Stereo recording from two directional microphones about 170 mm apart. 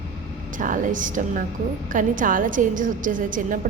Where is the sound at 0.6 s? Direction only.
50° right (ahead or behind).